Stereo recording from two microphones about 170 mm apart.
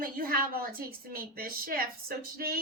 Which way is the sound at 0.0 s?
60° right (ahead or behind).